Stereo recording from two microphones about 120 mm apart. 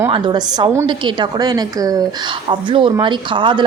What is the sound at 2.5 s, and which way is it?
A woman's voice, 45° right (ahead or behind).